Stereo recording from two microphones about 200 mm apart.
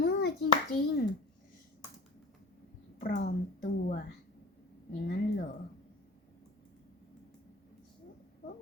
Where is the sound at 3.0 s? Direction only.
40° left (ahead or behind).